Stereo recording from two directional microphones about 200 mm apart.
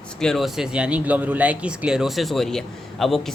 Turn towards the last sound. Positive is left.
turn(degrees=0)  # may be behind; listen again after turning